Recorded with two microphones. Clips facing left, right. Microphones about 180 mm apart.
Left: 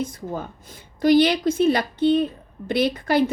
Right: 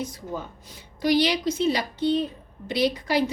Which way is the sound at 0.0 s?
55° left (ahead or behind).